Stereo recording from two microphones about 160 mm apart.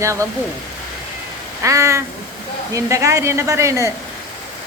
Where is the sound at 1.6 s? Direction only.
20° right (ahead or behind).